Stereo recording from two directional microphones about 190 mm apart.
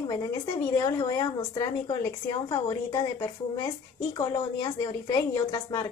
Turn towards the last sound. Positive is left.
turn(degrees=15)  # may be behind; listen again after turning